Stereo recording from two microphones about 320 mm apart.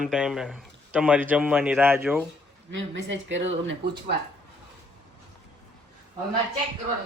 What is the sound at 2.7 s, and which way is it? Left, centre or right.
Speech, right.